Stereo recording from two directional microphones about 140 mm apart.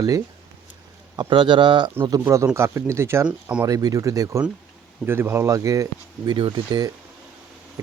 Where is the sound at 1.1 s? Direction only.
35° right (ahead or behind).